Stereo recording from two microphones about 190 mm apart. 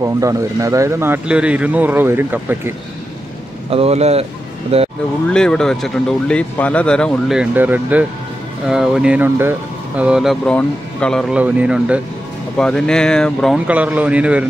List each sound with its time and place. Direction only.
0.0 s a man's voice: 15° right (ahead or behind)
3.7 s speech: 35° right (ahead or behind)
5.3 s speech: 5° left (ahead or behind)